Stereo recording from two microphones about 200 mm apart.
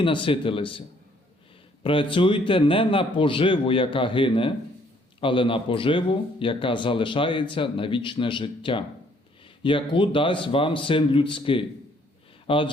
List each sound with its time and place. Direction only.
0.0 s speech: 25° left (ahead or behind)